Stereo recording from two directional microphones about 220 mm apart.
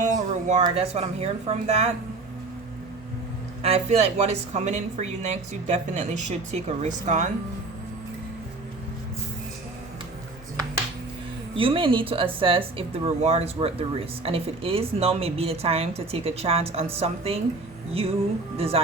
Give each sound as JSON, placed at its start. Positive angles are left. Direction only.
{"t": 0.0, "sound": "a sound", "side_deg": -35}
{"t": 0.6, "sound": "speech", "side_deg": -30}
{"t": 3.6, "sound": "speech", "side_deg": -30}
{"t": 11.5, "sound": "speech", "side_deg": -25}
{"t": 18.5, "sound": "speech", "side_deg": -25}